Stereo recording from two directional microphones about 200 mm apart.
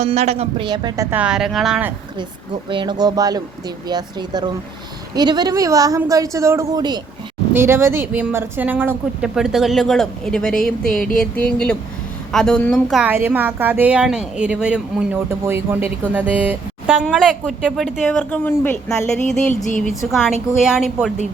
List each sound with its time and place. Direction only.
0.0 s speech: 35° right (ahead or behind)
1.1 s speech: 5° right (ahead or behind)
2.6 s a woman's voice: 25° right (ahead or behind); by 17.0 s 5° right (ahead or behind)
17.0 s speech: 5° left (ahead or behind)